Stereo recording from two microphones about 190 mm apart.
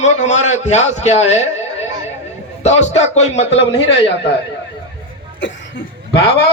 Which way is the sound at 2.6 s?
35° left (ahead or behind).